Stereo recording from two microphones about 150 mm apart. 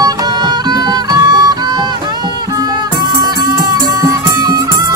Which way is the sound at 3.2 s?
25° right (ahead or behind).